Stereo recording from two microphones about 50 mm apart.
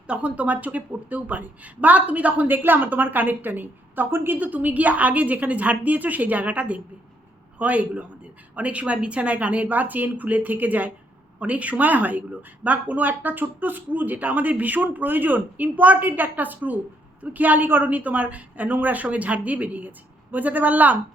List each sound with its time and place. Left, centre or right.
0.1 s speech: right
4.4 s a woman's voice: right